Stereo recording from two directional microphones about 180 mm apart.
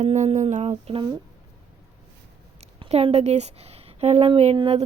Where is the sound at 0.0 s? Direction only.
40° right (ahead or behind).